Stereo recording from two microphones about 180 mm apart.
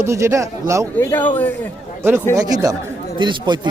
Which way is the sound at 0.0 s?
15° right (ahead or behind).